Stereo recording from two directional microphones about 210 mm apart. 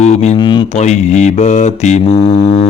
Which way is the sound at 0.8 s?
30° left (ahead or behind).